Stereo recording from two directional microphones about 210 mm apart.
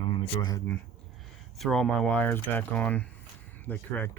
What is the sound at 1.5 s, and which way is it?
Speech, centre (ahead or behind).